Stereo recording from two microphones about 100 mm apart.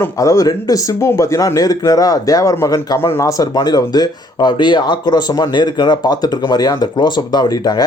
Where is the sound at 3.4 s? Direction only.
45° left (ahead or behind).